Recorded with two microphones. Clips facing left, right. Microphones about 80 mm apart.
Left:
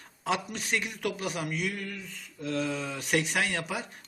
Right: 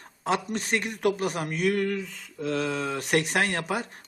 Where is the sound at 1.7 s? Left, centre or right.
Right.